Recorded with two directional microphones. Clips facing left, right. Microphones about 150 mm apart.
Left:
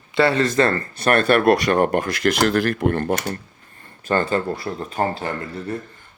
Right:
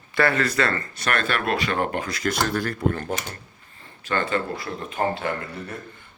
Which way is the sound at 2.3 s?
80° left.